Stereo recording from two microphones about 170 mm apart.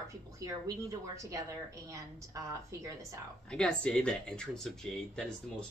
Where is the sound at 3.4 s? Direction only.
5° left (ahead or behind).